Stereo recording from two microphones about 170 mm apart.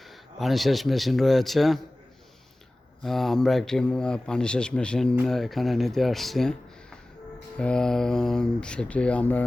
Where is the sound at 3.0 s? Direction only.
Centre (ahead or behind).